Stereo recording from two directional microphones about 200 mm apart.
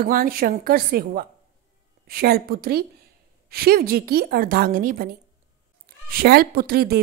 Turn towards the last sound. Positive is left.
turn(degrees=-50)  # may be behind; listen again after turning